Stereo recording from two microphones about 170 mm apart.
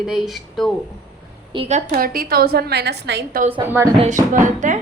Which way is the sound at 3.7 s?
15° right (ahead or behind).